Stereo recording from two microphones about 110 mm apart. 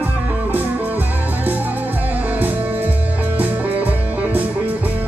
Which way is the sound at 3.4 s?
15° right (ahead or behind).